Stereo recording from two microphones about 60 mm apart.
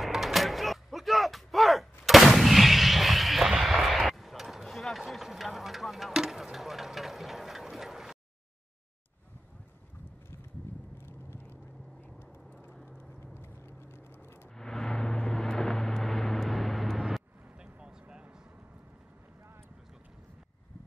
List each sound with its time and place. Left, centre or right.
0.0 s a sound: centre
11.0 s vehicle: left
13.4 s vehicle: left
14.6 s vehicle: centre
17.6 s vehicle: centre